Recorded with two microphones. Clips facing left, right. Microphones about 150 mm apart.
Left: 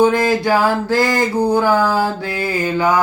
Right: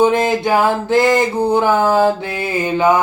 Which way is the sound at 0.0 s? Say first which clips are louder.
Even; 20° right (ahead or behind).